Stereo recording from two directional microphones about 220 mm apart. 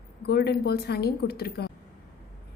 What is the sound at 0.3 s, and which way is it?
A woman's voice, 45° left (ahead or behind).